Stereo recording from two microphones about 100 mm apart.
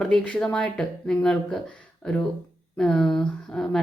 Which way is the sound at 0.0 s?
10° left (ahead or behind).